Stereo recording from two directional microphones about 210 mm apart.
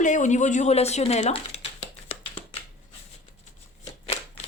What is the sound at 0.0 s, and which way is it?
A woman's voice, 35° left (ahead or behind).